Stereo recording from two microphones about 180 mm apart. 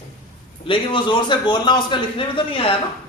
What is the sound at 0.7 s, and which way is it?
A man's voice, 25° left (ahead or behind).